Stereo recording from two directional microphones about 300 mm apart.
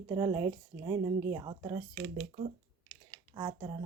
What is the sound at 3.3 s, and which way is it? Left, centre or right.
Speech, centre.